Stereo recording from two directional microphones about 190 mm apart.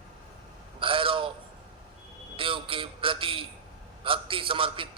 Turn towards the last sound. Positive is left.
turn(degrees=-25)  # may be behind; listen again after turning